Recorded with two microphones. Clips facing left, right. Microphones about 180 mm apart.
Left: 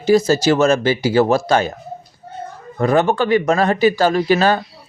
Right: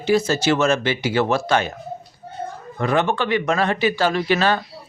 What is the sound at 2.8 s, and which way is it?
Speech, 40° left (ahead or behind).